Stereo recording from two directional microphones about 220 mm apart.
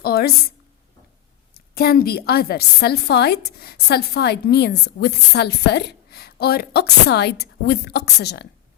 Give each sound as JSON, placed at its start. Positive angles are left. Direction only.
{"t": 0.0, "sound": "a woman's voice", "side_deg": 45}
{"t": 1.7, "sound": "a woman's voice", "side_deg": 45}